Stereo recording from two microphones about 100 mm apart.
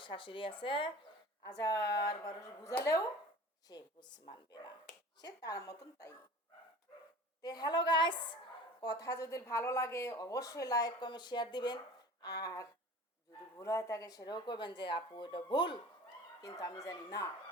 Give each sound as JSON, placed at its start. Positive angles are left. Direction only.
{"t": 0.0, "sound": "speech", "side_deg": 55}
{"t": 1.5, "sound": "speech", "side_deg": 35}
{"t": 3.7, "sound": "speech", "side_deg": 45}
{"t": 7.4, "sound": "speech", "side_deg": 45}
{"t": 8.8, "sound": "speech", "side_deg": 40}
{"t": 16.4, "sound": "speech", "side_deg": 35}